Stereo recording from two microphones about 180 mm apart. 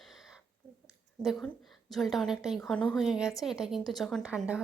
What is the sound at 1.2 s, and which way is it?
A woman's voice, centre (ahead or behind).